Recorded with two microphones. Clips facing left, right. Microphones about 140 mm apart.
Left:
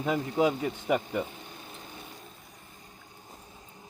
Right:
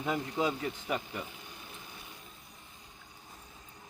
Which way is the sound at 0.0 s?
15° left (ahead or behind).